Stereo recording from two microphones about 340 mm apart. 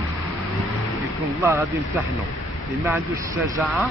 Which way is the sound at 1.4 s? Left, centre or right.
Centre.